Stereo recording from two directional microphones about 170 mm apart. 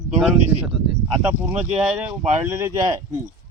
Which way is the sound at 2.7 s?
20° right (ahead or behind).